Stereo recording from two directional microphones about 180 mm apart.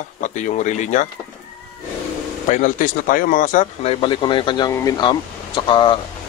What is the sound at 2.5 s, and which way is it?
Speech, 45° left (ahead or behind).